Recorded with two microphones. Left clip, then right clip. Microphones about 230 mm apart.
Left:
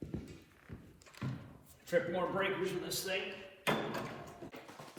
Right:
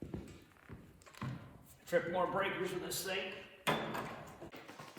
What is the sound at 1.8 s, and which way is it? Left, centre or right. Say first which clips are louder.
A man's voice: even; centre.